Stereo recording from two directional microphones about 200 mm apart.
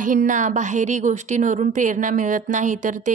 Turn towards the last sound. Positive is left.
turn(degrees=-40)  # may be behind; listen again after turning